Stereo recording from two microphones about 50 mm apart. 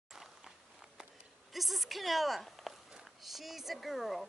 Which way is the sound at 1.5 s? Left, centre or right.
Centre.